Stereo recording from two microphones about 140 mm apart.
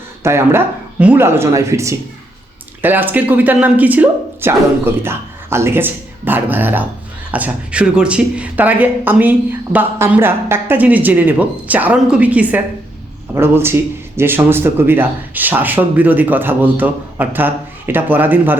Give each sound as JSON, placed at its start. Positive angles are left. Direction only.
{"t": 0.2, "sound": "speech", "side_deg": -20}